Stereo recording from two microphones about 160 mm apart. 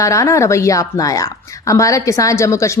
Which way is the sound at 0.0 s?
20° left (ahead or behind).